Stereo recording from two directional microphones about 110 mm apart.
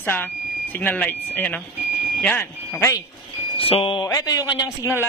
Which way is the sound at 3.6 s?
60° left (ahead or behind).